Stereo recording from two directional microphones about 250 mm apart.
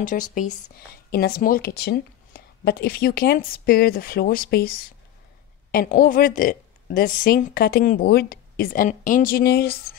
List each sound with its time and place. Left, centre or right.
0.0 s speech: left